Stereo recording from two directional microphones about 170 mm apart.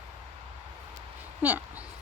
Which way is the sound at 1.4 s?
10° right (ahead or behind).